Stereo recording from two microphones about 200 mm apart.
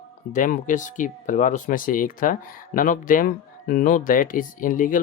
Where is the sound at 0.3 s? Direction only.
40° left (ahead or behind).